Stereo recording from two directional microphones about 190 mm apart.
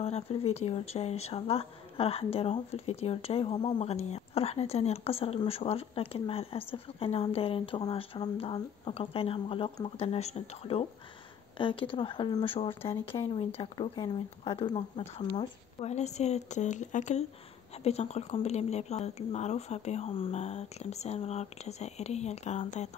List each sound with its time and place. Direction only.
0.0 s a woman's voice: 35° left (ahead or behind)